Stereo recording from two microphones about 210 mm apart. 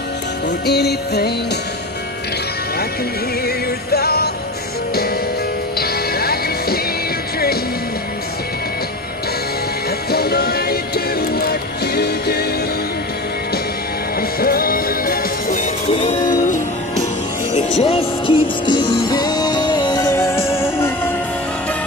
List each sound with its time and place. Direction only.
0.7 s music: 50° left (ahead or behind)
3.4 s music: 50° left (ahead or behind)
5.8 s music: 45° left (ahead or behind)
10.1 s music: 50° left (ahead or behind)
14.4 s music: 45° left (ahead or behind)
15.9 s music: 35° left (ahead or behind); by 21.1 s 10° left (ahead or behind)